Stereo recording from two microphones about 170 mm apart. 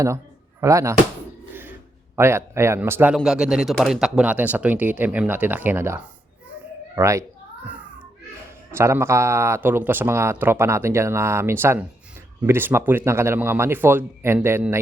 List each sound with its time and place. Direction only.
0.6 s speech: 20° right (ahead or behind)
2.1 s speech: 15° right (ahead or behind)
8.7 s speech: 15° right (ahead or behind)